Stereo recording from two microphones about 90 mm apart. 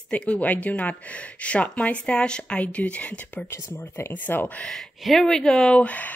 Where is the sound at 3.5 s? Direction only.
30° left (ahead or behind).